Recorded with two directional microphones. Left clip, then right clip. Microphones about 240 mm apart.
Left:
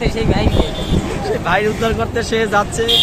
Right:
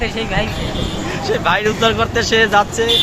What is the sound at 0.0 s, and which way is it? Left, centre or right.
Speech, left.